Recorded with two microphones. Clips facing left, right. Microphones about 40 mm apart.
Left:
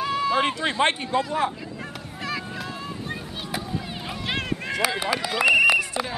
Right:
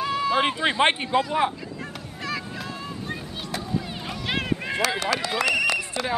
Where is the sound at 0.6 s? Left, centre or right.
Right.